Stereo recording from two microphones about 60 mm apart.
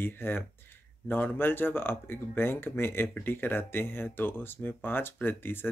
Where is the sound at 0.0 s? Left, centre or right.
Left.